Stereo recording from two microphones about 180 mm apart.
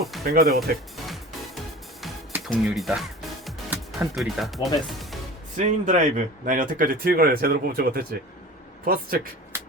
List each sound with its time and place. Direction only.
0.3 s speech: 55° right (ahead or behind)
0.9 s music: centre (ahead or behind)
2.4 s music: centre (ahead or behind)
5.5 s speech: 45° right (ahead or behind)